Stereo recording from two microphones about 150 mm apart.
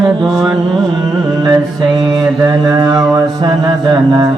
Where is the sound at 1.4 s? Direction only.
25° right (ahead or behind).